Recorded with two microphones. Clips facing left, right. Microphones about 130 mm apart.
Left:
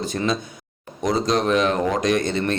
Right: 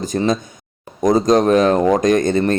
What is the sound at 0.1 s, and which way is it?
Speech, 40° right (ahead or behind).